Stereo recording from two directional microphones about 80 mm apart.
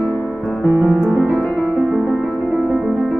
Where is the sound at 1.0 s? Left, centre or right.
Right.